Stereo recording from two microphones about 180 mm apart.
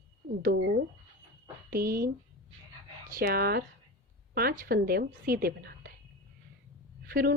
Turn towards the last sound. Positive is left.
turn(degrees=-55)  # may be behind; listen again after turning